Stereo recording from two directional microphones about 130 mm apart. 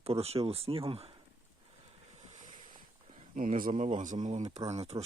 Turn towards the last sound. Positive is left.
turn(degrees=-55)  # may be behind; listen again after turning